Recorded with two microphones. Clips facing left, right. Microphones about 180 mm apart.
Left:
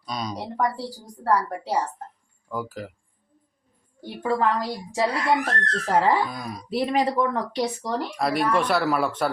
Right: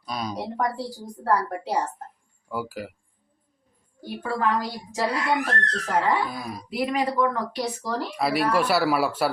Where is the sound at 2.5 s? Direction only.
10° right (ahead or behind).